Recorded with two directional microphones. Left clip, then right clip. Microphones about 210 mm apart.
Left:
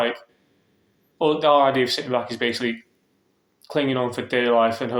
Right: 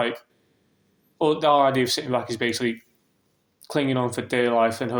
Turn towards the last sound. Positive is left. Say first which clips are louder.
# left 2 dB
turn(degrees=-45)  # may be behind; listen again after turning